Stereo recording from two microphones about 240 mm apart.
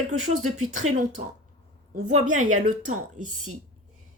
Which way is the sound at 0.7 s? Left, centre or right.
Right.